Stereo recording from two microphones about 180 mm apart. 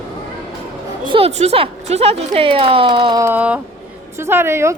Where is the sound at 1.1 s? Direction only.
30° right (ahead or behind).